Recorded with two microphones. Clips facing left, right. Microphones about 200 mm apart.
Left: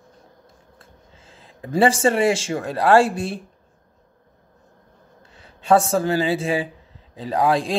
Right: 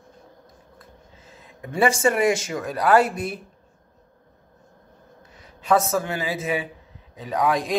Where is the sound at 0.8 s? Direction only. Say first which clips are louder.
Right 1 dB; 30° left (ahead or behind).